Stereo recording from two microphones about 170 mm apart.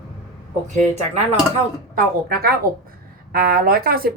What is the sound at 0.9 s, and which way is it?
Speech, 40° right (ahead or behind).